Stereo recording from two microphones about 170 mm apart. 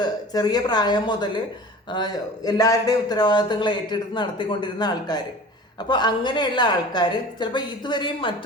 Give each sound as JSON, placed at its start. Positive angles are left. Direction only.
{"t": 0.0, "sound": "speech", "side_deg": 25}